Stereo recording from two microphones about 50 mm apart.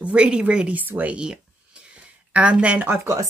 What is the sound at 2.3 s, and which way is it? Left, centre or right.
Speech, right.